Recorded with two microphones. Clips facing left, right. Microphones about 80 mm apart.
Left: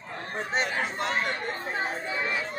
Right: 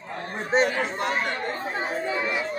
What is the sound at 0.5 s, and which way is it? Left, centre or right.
Chatter, right.